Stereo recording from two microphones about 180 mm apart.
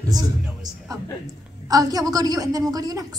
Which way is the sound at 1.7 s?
20° right (ahead or behind).